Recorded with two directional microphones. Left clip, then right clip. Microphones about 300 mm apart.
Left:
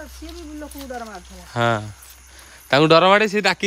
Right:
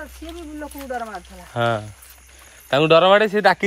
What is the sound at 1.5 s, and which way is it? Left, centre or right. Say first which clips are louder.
Speech: left 1 dB; centre.